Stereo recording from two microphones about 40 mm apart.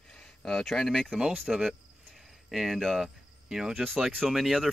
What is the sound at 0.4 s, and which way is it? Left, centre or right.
Speech, centre.